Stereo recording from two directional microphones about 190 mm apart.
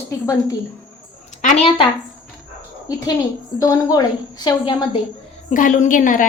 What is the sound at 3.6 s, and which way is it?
A woman's voice, 20° left (ahead or behind).